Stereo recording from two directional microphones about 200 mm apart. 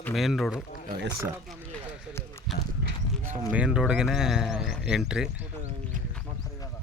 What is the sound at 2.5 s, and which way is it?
Clip-clop, centre (ahead or behind).